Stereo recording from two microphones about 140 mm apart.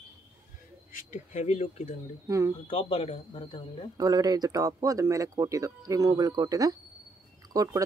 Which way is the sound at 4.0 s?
25° right (ahead or behind).